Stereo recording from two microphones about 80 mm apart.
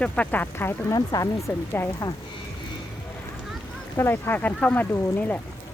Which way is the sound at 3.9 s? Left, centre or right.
Left.